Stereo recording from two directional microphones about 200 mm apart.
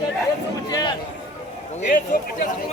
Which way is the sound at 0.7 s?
20° left (ahead or behind).